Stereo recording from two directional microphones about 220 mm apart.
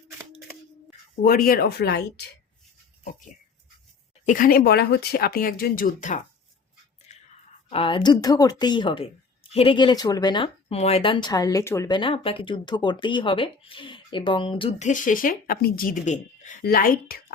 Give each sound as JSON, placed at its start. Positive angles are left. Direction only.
{"t": 1.2, "sound": "speech", "side_deg": 40}
{"t": 4.3, "sound": "speech", "side_deg": 40}
{"t": 7.1, "sound": "whispering", "side_deg": 30}
{"t": 7.7, "sound": "speech", "side_deg": 25}